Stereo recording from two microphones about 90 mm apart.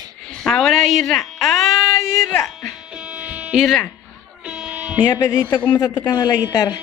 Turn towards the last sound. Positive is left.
turn(degrees=45)  # may be behind; listen again after turning